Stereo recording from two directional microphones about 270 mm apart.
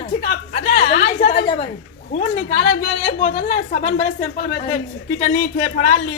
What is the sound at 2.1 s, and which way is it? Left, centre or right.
Speech, left.